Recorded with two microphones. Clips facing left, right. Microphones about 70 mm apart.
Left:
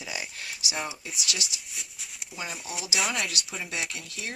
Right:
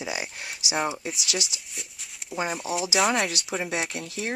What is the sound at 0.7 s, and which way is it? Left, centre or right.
Speech, right.